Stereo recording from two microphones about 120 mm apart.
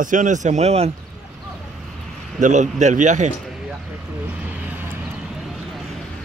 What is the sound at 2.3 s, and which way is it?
Speech, 90° right.